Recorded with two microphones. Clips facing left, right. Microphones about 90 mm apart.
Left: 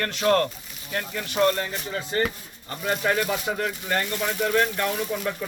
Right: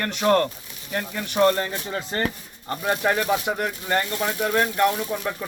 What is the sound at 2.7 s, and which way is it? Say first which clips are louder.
Speech: right 2 dB; 20° right (ahead or behind).